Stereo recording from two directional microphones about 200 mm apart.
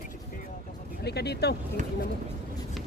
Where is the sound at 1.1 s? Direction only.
55° left (ahead or behind).